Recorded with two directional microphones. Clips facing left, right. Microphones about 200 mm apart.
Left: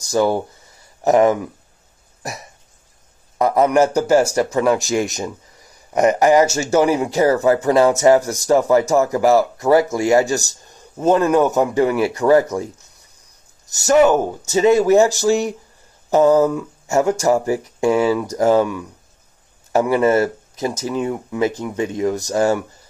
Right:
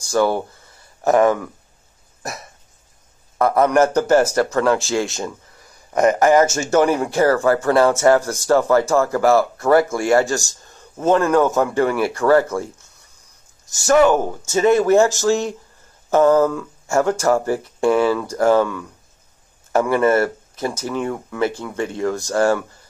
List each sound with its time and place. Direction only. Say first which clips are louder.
0.0 s speech: left 1 dB; 15° left (ahead or behind)
3.3 s speech: left 1 dB; 15° left (ahead or behind)
13.8 s speech: left 1 dB; 20° left (ahead or behind)